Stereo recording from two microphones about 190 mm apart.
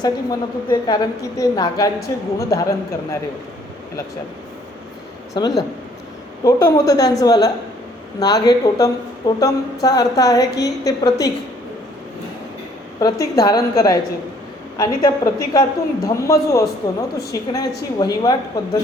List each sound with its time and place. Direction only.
0.0 s a woman's voice: 20° left (ahead or behind)
5.3 s a woman's voice: 20° left (ahead or behind)
13.0 s a woman's voice: 20° left (ahead or behind)